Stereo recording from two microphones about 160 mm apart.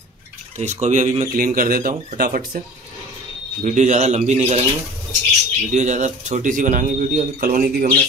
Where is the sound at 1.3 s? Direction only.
60° right (ahead or behind).